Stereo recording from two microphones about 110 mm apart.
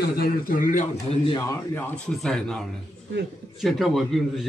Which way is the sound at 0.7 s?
70° left (ahead or behind).